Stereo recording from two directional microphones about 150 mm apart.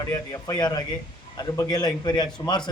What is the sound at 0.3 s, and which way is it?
A man's voice, 25° left (ahead or behind).